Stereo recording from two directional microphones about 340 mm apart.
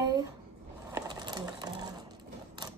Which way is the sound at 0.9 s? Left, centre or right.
Centre.